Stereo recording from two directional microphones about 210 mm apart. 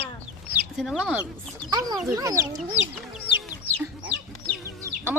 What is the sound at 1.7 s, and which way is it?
Speech, 20° right (ahead or behind).